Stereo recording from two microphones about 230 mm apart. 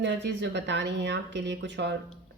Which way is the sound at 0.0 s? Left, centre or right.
Right.